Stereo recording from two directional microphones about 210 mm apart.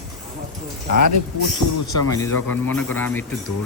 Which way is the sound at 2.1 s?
10° left (ahead or behind).